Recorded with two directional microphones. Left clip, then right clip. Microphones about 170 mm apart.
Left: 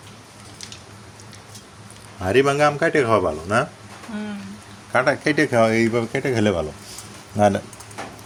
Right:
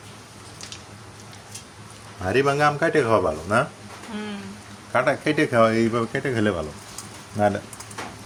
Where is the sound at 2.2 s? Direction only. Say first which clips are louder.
Left 3 dB; 25° left (ahead or behind).